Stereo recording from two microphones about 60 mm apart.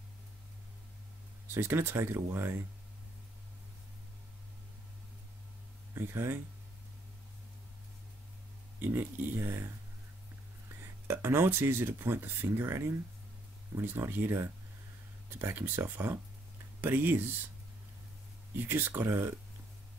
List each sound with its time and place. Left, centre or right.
1.5 s speech: right
5.9 s speech: right
8.7 s speech: right
10.8 s speech: right
18.6 s speech: right